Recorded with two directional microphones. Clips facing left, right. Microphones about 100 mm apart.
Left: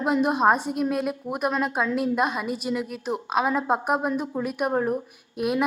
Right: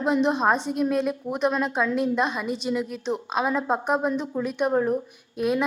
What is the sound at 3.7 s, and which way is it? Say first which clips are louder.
A woman's voice: even; 10° left (ahead or behind).